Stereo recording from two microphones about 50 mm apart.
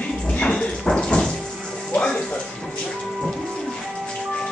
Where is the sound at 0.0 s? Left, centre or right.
Left.